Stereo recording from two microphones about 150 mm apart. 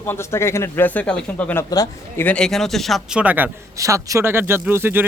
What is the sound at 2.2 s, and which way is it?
A man's voice, 5° left (ahead or behind).